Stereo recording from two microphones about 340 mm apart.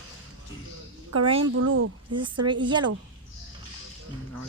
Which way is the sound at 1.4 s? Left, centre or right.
Right.